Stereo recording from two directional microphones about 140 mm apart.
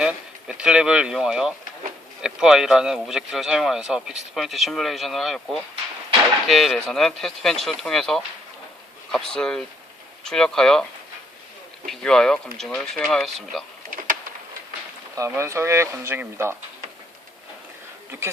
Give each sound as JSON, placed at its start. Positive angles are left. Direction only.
{"t": 0.0, "sound": "speech", "side_deg": -5}
{"t": 11.9, "sound": "speech", "side_deg": 5}
{"t": 15.1, "sound": "speech", "side_deg": -20}